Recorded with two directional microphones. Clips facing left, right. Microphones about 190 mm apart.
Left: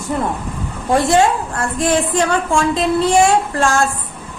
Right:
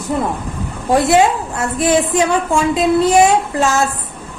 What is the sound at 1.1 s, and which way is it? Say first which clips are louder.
A woman's voice: right 1 dB; 5° right (ahead or behind).